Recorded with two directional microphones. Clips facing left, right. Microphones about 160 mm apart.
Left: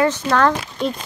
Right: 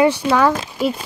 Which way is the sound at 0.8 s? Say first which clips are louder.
Right 3 dB; 5° right (ahead or behind).